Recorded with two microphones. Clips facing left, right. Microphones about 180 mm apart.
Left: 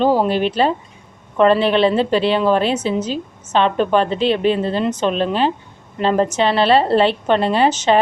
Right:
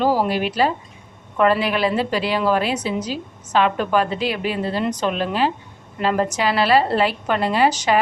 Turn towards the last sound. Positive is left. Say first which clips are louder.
# left 3 dB
turn(degrees=25)  # may be behind; listen again after turning